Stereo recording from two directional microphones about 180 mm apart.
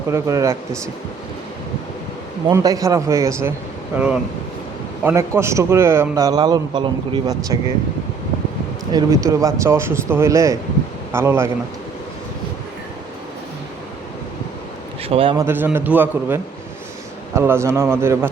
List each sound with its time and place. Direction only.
0.1 s a man's voice: 15° right (ahead or behind)
2.5 s a man's voice: 20° right (ahead or behind)
8.9 s a man's voice: 20° right (ahead or behind)
15.1 s a man's voice: 30° right (ahead or behind)
15.4 s a man's voice: 10° right (ahead or behind)